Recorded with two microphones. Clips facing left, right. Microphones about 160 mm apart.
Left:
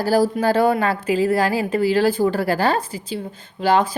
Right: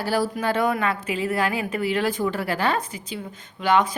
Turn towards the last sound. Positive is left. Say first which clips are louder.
# left 3 dB
turn(degrees=30)  # may be behind; listen again after turning